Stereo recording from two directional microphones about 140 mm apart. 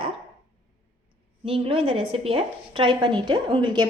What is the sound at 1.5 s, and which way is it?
A woman's voice, 45° right (ahead or behind).